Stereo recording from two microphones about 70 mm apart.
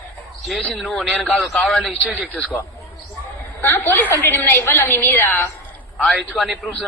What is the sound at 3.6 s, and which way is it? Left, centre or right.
A woman's voice, left.